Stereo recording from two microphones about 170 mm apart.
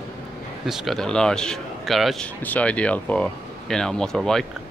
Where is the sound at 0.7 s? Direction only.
Centre (ahead or behind).